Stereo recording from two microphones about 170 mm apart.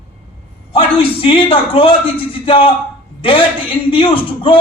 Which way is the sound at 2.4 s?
35° left (ahead or behind).